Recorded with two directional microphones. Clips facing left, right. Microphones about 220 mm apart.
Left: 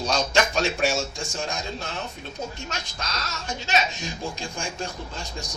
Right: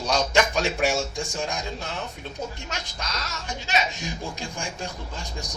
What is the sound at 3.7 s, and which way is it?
A man's voice, 15° right (ahead or behind).